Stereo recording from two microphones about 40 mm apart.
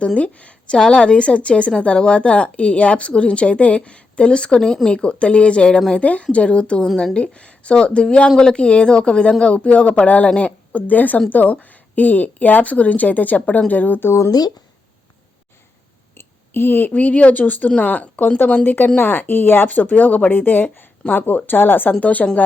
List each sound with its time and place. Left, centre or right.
0.2 s a woman's voice: left
6.8 s speech: centre
7.2 s a woman's voice: left
16.1 s a sound: left
16.9 s a woman's voice: left
22.0 s a woman's voice: left